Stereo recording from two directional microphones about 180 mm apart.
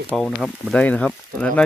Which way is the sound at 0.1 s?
Centre (ahead or behind).